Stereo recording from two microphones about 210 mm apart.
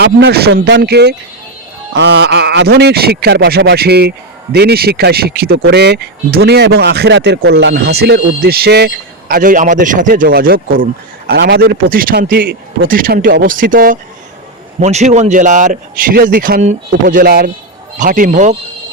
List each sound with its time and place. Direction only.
0.0 s a man's voice: 50° right (ahead or behind)